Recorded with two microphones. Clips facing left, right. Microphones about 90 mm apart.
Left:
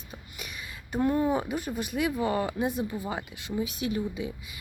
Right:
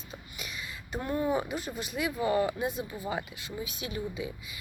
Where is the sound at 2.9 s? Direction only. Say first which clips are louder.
Left 1 dB; 20° left (ahead or behind).